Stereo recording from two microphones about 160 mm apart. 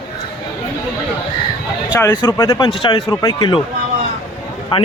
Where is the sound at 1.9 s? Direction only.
15° left (ahead or behind).